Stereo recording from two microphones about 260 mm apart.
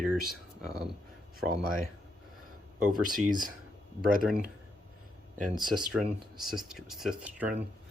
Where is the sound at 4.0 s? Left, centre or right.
Right.